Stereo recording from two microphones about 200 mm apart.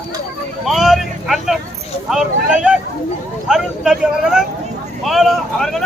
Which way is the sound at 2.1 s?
5° right (ahead or behind).